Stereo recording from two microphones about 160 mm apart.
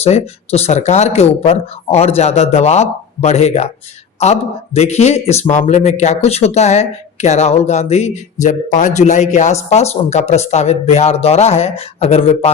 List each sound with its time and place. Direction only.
0.0 s a man's voice: 40° left (ahead or behind)